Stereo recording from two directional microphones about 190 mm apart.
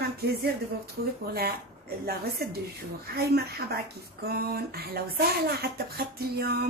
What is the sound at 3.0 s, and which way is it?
Speech, 55° right (ahead or behind).